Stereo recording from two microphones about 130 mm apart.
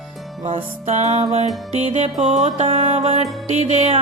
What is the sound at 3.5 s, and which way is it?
Music, 60° right (ahead or behind).